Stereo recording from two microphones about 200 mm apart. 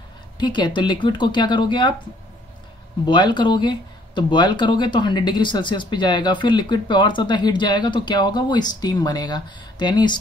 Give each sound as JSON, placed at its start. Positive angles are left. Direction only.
{"t": 0.4, "sound": "speech", "side_deg": 20}
{"t": 3.1, "sound": "speech", "side_deg": 20}